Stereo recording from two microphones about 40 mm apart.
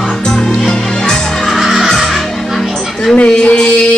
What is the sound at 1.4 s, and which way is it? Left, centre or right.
Music, centre.